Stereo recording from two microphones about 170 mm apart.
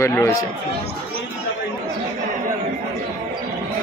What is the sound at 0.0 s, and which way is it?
Speech, 15° left (ahead or behind).